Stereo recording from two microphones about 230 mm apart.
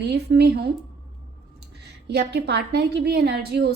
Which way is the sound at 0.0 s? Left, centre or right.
Right.